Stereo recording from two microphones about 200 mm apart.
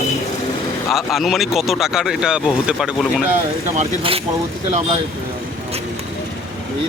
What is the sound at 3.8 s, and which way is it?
Speech, 30° right (ahead or behind).